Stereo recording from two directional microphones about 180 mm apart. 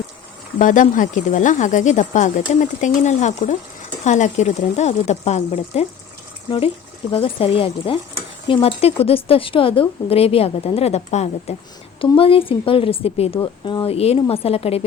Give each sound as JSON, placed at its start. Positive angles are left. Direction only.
{"t": 0.6, "sound": "speech", "side_deg": 45}
{"t": 7.1, "sound": "speech", "side_deg": 30}